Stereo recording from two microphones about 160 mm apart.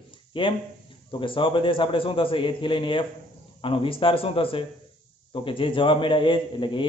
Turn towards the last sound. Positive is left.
turn(degrees=30)  # may be behind; listen again after turning